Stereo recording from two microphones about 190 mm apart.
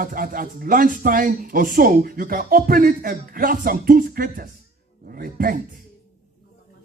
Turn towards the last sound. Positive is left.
turn(degrees=-50)  # may be behind; listen again after turning